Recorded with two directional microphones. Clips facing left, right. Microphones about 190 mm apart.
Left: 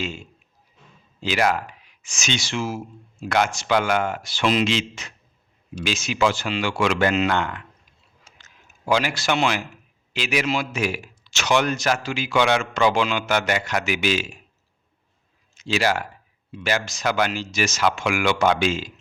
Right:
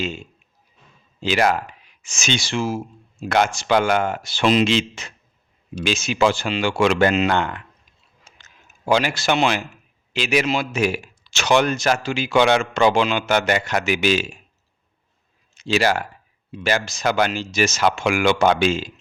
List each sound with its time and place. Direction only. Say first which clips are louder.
1.2 s a man's voice: right 3 dB; 30° right (ahead or behind)
8.9 s a man's voice: right 3 dB; 25° right (ahead or behind)
15.5 s a man's voice: right 3 dB; 30° right (ahead or behind)